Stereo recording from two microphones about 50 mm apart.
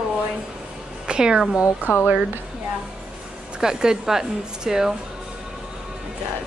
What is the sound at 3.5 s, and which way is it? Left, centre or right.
A woman's voice, centre.